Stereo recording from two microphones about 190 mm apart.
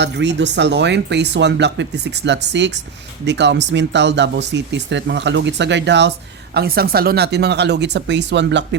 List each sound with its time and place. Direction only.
0.0 s speech: 65° right (ahead or behind)
6.5 s speech: 55° right (ahead or behind)